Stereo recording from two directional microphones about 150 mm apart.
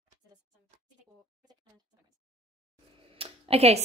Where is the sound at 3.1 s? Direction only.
40° right (ahead or behind).